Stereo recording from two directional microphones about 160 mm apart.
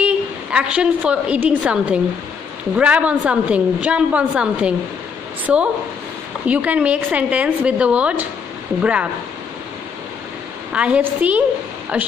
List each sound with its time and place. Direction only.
0.0 s a woman's voice: 5° right (ahead or behind)
6.4 s a woman's voice: 10° right (ahead or behind)
10.7 s a woman's voice: 5° right (ahead or behind)